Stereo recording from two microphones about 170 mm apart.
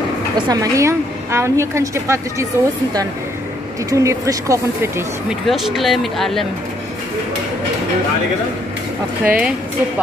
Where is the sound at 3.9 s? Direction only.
20° right (ahead or behind).